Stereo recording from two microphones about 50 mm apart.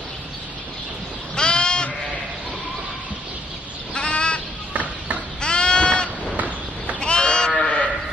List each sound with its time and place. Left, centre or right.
1.3 s goat: centre
3.9 s sheep: left
4.7 s a sound: right
5.4 s goat: left
6.3 s a sound: right
7.0 s sheep: centre